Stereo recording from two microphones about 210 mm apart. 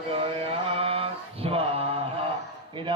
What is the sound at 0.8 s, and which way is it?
Mantra, 25° right (ahead or behind).